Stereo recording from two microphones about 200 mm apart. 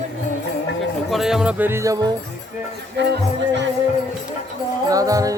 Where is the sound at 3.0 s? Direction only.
60° right (ahead or behind).